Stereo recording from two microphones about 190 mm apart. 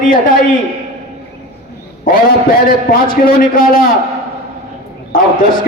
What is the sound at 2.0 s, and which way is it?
A man's voice, 45° left (ahead or behind).